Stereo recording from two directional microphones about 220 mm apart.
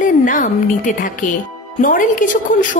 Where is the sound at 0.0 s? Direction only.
35° left (ahead or behind).